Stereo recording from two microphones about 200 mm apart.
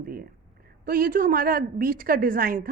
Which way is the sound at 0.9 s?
45° right (ahead or behind).